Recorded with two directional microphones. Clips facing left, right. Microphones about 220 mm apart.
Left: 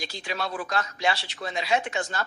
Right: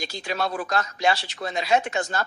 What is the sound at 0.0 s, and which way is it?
Speech, 45° right (ahead or behind).